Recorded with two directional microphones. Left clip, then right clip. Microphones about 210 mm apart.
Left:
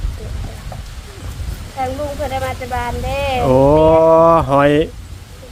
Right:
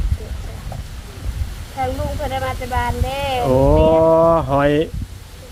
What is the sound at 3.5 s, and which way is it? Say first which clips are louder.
Speech: left 4 dB; 15° left (ahead or behind).